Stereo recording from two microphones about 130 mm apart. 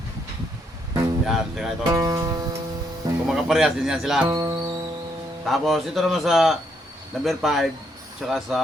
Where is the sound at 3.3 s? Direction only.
Centre (ahead or behind).